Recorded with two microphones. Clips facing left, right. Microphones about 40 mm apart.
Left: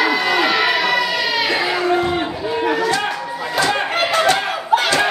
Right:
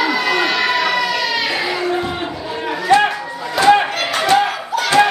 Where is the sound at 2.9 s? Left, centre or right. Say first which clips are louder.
Right 8 dB; right.